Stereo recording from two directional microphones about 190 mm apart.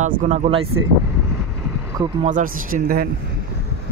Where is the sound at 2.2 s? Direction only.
45° right (ahead or behind).